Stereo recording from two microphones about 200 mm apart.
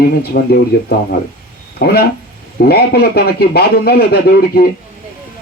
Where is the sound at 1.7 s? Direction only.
50° left (ahead or behind).